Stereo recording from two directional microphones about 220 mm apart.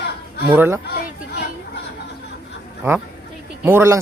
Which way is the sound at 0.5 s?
10° right (ahead or behind).